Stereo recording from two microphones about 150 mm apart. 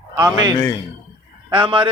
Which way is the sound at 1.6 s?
35° right (ahead or behind).